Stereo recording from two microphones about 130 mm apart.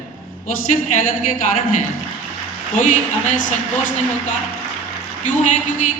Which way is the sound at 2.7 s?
80° left.